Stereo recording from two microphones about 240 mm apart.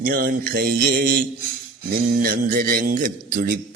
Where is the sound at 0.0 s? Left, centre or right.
Right.